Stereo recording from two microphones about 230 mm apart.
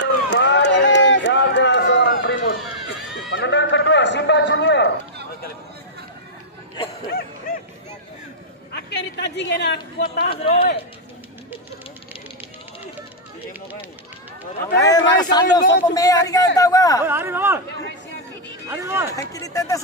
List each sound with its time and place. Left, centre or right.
0.0 s run: left
3.3 s a sound: left
7.1 s bow-wow: left
8.7 s speech: left
10.3 s speech: left
14.8 s a man's voice: centre
17.0 s speech: centre
18.7 s speech: centre
19.3 s a man's voice: centre